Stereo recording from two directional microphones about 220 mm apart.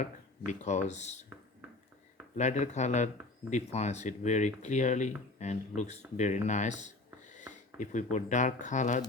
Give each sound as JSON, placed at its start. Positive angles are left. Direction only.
{"t": 0.0, "sound": "speech", "side_deg": 35}
{"t": 2.3, "sound": "speech", "side_deg": 35}
{"t": 6.1, "sound": "a sound", "side_deg": 30}
{"t": 8.1, "sound": "speech", "side_deg": 35}